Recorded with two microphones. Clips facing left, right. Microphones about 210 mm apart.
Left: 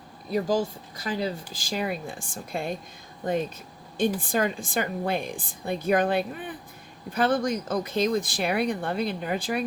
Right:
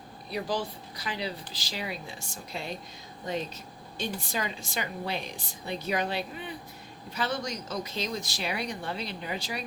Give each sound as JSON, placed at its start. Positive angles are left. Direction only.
{"t": 0.3, "sound": "speech", "side_deg": 45}